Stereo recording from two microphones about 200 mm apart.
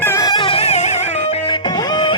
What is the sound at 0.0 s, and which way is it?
Music, 15° left (ahead or behind).